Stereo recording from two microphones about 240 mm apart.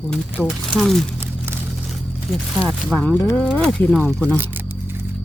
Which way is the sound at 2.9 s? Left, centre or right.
Centre.